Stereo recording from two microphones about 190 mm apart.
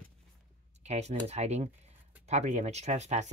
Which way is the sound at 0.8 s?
35° right (ahead or behind).